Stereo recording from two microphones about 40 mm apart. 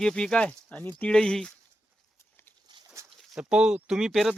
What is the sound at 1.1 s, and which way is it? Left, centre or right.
Speech, centre.